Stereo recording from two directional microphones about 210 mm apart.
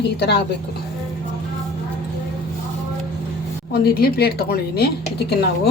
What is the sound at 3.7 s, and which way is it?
Speech, 45° left (ahead or behind).